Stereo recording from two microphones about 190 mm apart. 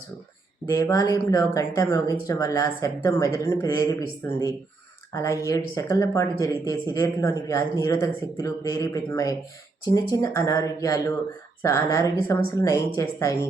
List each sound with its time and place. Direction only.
0.7 s speech: 20° left (ahead or behind)